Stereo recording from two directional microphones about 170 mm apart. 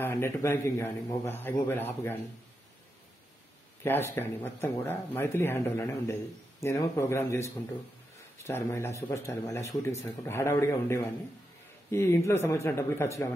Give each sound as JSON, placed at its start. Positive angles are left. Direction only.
{"t": 0.0, "sound": "speech", "side_deg": 15}
{"t": 3.8, "sound": "speech", "side_deg": 15}